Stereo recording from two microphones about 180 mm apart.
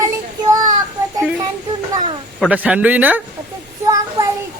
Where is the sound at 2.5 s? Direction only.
5° right (ahead or behind).